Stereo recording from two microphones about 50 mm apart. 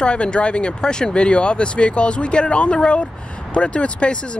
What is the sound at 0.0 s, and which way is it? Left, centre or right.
Speech, centre.